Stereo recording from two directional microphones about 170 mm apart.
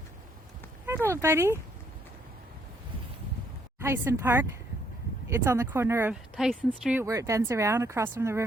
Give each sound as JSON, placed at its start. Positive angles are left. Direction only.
{"t": 1.1, "sound": "speech", "side_deg": -15}
{"t": 3.8, "sound": "speech", "side_deg": -15}
{"t": 6.3, "sound": "speech", "side_deg": 0}
{"t": 7.0, "sound": "speech", "side_deg": -20}